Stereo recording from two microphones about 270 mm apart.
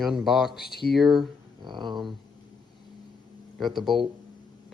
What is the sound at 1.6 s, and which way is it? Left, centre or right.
Speech, centre.